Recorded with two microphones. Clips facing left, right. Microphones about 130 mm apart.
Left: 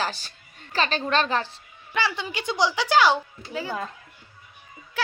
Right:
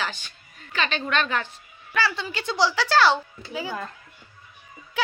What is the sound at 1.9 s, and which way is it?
A woman's voice, 20° left (ahead or behind).